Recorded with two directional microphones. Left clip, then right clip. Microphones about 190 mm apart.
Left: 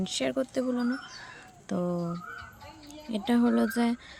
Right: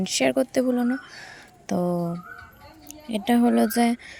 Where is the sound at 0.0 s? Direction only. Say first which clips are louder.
Right 8 dB; 20° right (ahead or behind).